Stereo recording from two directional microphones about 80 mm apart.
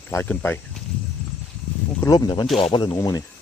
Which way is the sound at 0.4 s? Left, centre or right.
Left.